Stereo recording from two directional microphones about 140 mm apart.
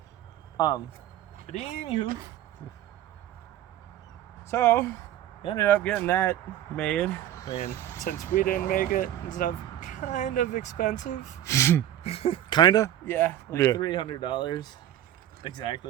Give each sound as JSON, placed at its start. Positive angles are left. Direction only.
{"t": 0.5, "sound": "speech", "side_deg": 30}
{"t": 1.5, "sound": "speech", "side_deg": 45}
{"t": 4.4, "sound": "a man's voice", "side_deg": 15}
{"t": 6.7, "sound": "a man's voice", "side_deg": 5}
{"t": 7.7, "sound": "speech", "side_deg": 20}
{"t": 8.4, "sound": "speech", "side_deg": 80}
{"t": 11.4, "sound": "speech", "side_deg": 20}
{"t": 12.0, "sound": "speech", "side_deg": 45}
{"t": 13.1, "sound": "a man's voice", "side_deg": 15}
{"t": 13.7, "sound": "speech", "side_deg": 30}